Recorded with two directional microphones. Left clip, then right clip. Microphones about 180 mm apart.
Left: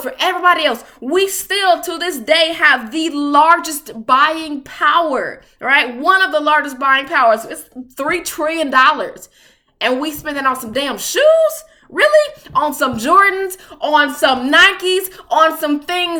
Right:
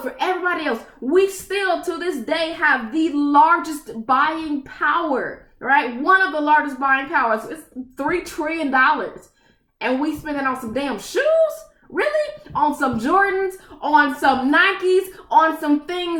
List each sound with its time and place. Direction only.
0.0 s a woman's voice: 15° left (ahead or behind)
12.5 s a woman's voice: 15° left (ahead or behind)